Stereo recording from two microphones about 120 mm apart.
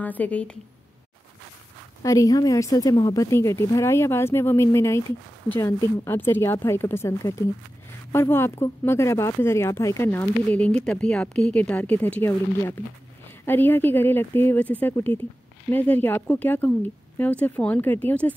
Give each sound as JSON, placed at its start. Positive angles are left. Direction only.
{"t": 0.0, "sound": "speech", "side_deg": 15}
{"t": 2.0, "sound": "a woman's voice", "side_deg": 30}